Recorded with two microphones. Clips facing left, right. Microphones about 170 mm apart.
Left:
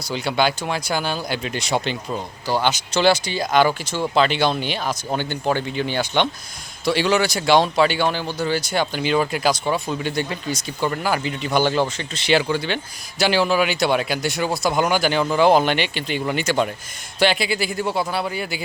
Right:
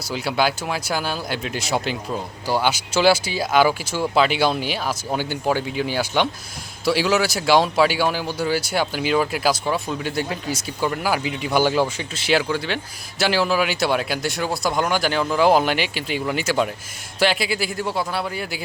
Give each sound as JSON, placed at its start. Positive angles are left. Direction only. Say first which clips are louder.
{"t": 0.1, "sound": "speech", "louder": "left 1 dB", "side_deg": -5}